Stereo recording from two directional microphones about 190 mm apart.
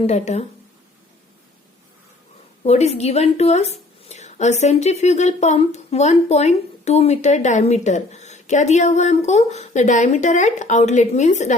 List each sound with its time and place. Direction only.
0.1 s a woman's voice: 35° left (ahead or behind)
2.6 s a woman's voice: 35° left (ahead or behind)